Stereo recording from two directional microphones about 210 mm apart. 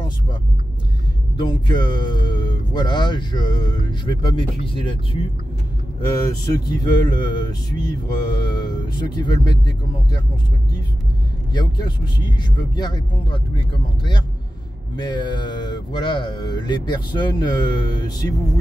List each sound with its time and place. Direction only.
1.3 s speech: 20° left (ahead or behind)
11.5 s speech: 20° left (ahead or behind)
15.0 s speech: 20° left (ahead or behind)